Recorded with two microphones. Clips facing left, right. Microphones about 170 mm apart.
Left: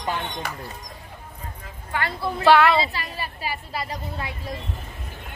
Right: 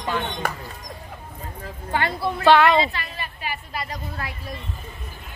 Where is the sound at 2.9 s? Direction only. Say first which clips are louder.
Left 1 dB; 35° left (ahead or behind).